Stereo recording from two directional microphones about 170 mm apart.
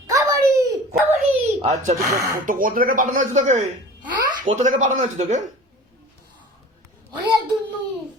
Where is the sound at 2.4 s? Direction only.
50° right (ahead or behind).